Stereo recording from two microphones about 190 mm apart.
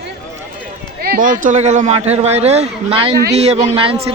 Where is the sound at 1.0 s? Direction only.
45° right (ahead or behind).